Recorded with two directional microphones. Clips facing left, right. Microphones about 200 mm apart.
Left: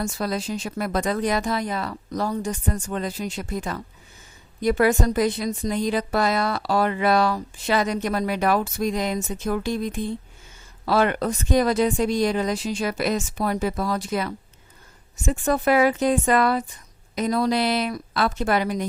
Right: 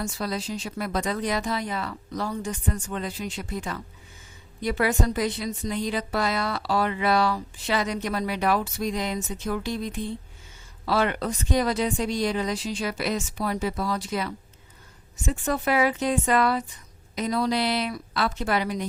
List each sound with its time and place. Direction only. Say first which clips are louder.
0.0 s a woman's voice: left 3 dB; 50° left (ahead or behind)